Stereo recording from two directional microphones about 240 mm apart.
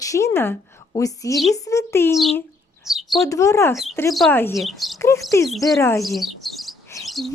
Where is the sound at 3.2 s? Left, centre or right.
Centre.